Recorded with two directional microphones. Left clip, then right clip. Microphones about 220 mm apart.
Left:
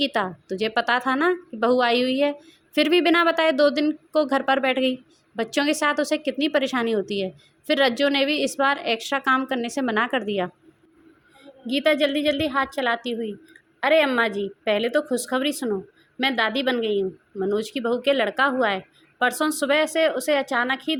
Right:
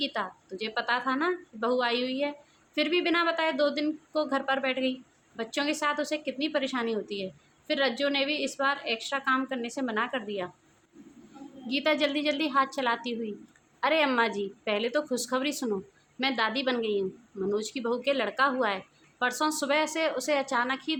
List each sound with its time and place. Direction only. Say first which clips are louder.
0.0 s a woman's voice: left 8 dB; 35° left (ahead or behind)
11.6 s a woman's voice: left 6 dB; 20° left (ahead or behind)